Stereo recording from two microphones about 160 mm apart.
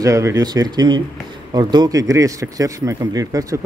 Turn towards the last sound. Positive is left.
turn(degrees=-20)  # may be behind; listen again after turning